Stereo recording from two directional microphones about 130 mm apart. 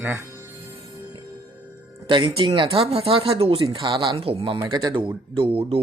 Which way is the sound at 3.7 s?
35° right (ahead or behind).